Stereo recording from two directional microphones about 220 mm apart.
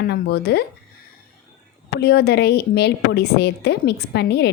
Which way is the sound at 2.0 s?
50° left (ahead or behind).